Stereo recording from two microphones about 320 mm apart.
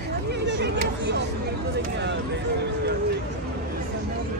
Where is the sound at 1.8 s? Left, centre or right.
Right.